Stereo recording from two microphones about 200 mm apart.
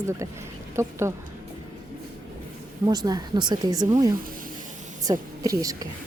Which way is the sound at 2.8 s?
20° right (ahead or behind).